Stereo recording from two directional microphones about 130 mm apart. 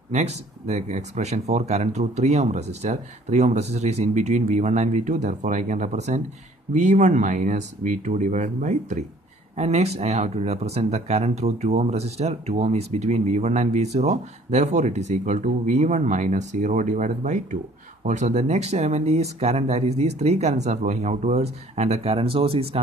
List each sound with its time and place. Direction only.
0.1 s speech: 55° right (ahead or behind)